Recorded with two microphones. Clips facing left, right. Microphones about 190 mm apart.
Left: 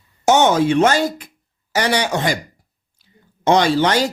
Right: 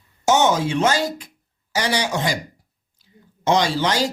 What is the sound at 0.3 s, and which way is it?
Speech, 60° left (ahead or behind).